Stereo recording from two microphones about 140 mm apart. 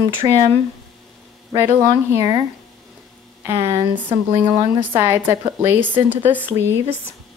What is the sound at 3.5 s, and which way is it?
A woman's voice, 15° right (ahead or behind).